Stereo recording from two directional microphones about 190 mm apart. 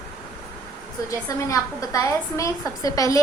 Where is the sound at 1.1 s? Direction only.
15° left (ahead or behind).